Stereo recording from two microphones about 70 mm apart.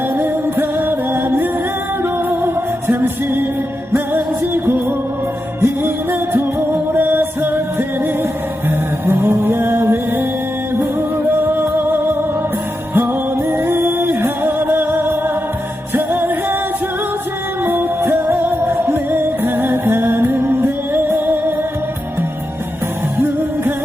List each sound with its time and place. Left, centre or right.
0.2 s music: right
9.0 s music: right
13.5 s music: right
17.6 s music: right